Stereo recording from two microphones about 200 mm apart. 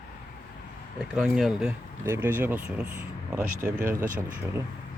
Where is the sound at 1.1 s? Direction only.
Centre (ahead or behind).